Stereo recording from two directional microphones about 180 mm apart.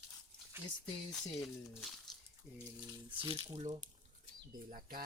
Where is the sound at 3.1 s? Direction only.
30° right (ahead or behind).